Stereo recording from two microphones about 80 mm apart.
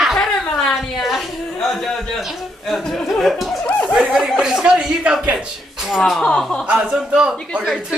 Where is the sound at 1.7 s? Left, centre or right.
Centre.